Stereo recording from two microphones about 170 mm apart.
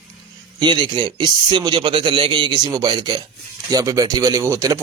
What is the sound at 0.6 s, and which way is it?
Speech, 25° right (ahead or behind).